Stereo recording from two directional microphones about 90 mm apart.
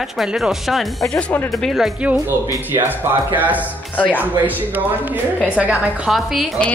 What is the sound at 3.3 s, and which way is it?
Speech, 20° right (ahead or behind).